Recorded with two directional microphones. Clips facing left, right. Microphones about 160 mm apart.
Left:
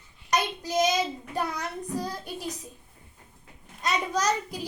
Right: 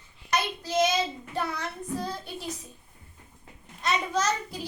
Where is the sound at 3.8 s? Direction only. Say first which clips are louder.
Even; 15° left (ahead or behind).